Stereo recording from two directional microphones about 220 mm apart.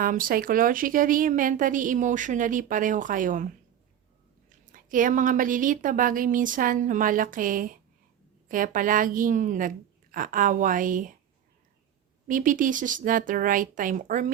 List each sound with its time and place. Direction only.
0.0 s a woman's voice: 40° right (ahead or behind)
12.3 s a woman's voice: 35° right (ahead or behind)